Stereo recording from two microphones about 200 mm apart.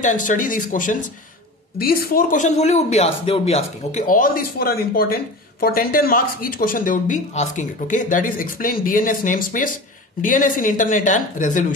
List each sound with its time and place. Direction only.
0.0 s speech: 40° left (ahead or behind)